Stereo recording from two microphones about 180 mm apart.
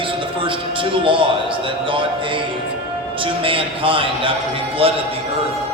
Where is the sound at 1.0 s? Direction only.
30° right (ahead or behind).